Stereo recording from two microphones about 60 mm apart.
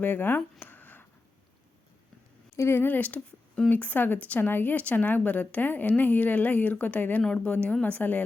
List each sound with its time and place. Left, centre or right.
0.0 s speech: left
0.6 s a sound: left
2.6 s speech: left
2.8 s speech: left
3.2 s speech: centre
3.7 s speech: left